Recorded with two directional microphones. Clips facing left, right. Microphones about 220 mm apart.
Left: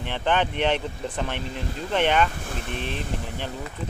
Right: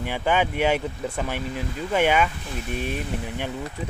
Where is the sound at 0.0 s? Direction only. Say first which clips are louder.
Right 1 dB; 10° right (ahead or behind).